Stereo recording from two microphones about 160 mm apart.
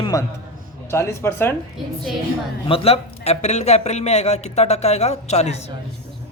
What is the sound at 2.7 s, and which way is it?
Speech, 40° left (ahead or behind).